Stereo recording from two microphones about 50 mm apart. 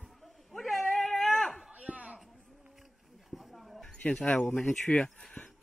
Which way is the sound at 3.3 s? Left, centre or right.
Centre.